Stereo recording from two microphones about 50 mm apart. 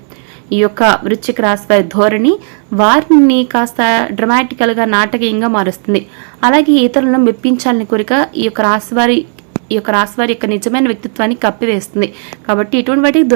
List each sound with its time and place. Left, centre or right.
0.5 s a woman's voice: centre
5.9 s a woman's voice: centre